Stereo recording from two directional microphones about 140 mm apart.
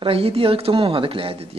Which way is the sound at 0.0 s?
45° right (ahead or behind).